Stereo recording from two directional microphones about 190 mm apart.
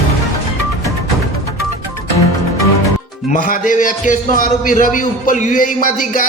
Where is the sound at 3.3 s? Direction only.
45° left (ahead or behind).